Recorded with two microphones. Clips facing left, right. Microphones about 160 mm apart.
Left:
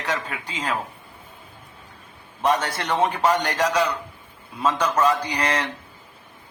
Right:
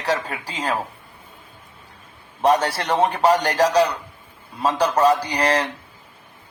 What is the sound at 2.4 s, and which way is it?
A man's voice, 35° right (ahead or behind).